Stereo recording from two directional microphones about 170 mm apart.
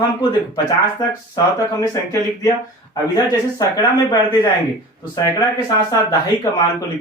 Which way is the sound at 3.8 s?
25° left (ahead or behind).